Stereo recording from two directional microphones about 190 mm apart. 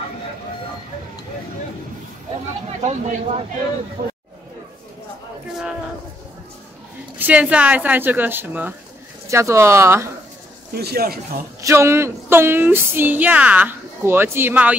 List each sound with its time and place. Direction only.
2.8 s speech: 35° right (ahead or behind)
7.2 s a woman's voice: 10° right (ahead or behind)
10.7 s speech: 55° right (ahead or behind)
11.6 s a woman's voice: 15° right (ahead or behind)